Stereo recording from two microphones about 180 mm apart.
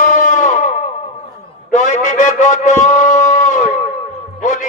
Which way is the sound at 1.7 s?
40° left (ahead or behind).